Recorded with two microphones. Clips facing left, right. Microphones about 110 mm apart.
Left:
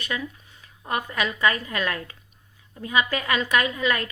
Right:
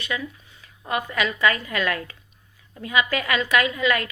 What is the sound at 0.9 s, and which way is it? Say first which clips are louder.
A woman's voice: right 2 dB; 40° left (ahead or behind).